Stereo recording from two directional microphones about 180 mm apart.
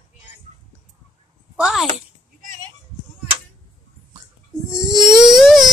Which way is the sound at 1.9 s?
45° right (ahead or behind).